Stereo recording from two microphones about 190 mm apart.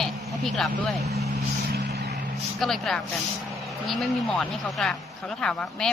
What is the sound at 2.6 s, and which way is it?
Speech, centre (ahead or behind).